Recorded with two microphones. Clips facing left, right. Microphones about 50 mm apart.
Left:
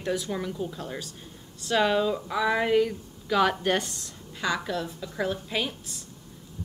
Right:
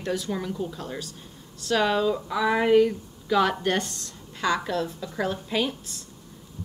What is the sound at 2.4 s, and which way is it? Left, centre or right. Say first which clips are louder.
A woman's voice: right 4 dB; centre.